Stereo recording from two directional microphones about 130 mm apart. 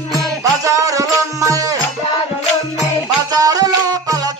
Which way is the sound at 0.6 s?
25° right (ahead or behind).